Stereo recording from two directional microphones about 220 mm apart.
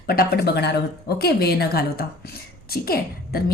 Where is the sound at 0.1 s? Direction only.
45° left (ahead or behind).